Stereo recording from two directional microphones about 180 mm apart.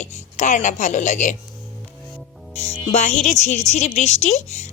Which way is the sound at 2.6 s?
40° left (ahead or behind).